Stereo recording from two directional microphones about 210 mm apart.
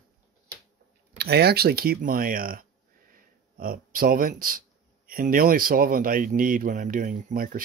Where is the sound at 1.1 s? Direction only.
50° right (ahead or behind).